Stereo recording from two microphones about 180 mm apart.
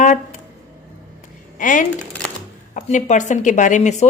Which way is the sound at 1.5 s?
45° left (ahead or behind).